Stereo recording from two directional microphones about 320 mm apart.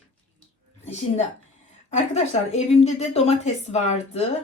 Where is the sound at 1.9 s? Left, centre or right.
Left.